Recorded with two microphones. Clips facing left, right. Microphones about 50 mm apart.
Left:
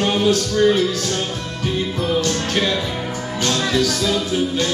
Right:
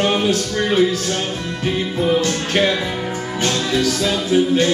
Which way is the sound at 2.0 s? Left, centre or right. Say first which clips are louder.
Right 3 dB; right.